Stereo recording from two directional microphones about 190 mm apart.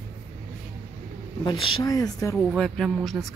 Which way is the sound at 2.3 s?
Centre (ahead or behind).